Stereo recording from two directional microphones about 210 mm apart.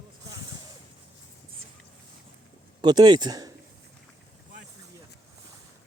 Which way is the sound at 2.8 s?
20° right (ahead or behind).